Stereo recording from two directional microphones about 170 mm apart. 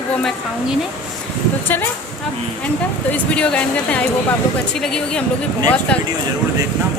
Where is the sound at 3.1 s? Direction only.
5° left (ahead or behind).